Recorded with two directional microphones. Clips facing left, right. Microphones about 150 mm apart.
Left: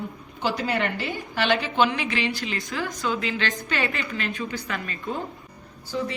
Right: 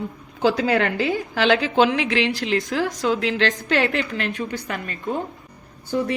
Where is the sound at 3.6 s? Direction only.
90° right.